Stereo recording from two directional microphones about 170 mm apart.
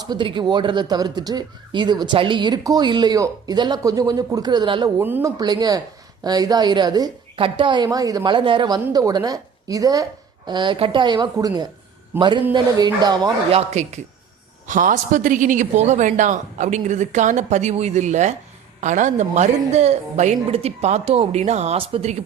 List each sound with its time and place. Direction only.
0.0 s speech: 25° right (ahead or behind)
4.9 s speech: 15° right (ahead or behind)
5.4 s speech: 25° right (ahead or behind)
12.5 s speech: 25° right (ahead or behind)
13.5 s speech: 40° right (ahead or behind)
14.7 s a woman's voice: 50° right (ahead or behind)